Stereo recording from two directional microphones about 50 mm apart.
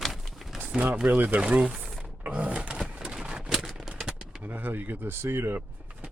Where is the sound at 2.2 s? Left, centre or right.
Right.